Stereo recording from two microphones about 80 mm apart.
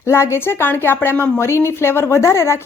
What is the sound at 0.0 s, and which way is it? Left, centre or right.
A woman's voice, left.